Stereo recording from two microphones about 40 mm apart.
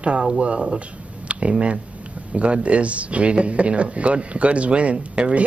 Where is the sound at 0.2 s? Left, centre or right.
Right.